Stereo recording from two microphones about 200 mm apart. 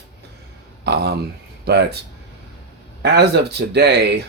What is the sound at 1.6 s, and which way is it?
Speech, 55° right (ahead or behind).